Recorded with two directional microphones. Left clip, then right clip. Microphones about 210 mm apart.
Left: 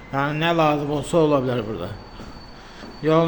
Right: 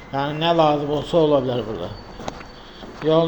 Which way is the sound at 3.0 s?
25° left (ahead or behind).